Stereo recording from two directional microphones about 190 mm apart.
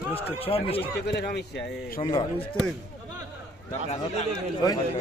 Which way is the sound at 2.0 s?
25° left (ahead or behind).